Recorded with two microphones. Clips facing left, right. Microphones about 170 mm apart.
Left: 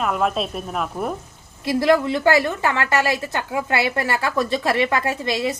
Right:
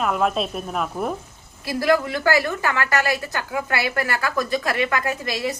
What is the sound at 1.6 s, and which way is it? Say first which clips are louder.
A woman's voice: left 3 dB; 20° left (ahead or behind).